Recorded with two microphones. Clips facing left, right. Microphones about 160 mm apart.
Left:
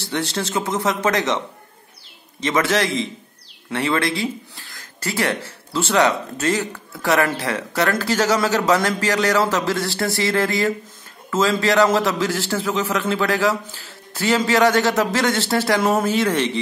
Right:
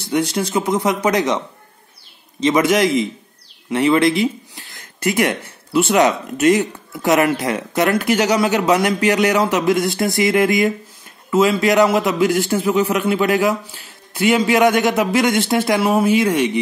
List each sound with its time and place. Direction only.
0.1 s a man's voice: 15° right (ahead or behind)
2.4 s a man's voice: 20° right (ahead or behind)